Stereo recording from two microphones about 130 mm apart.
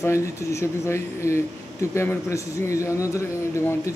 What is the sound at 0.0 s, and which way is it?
Speech, 20° left (ahead or behind).